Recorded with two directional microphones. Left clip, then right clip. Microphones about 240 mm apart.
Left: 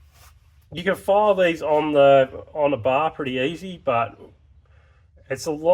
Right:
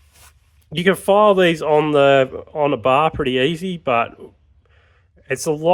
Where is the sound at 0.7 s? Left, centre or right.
Right.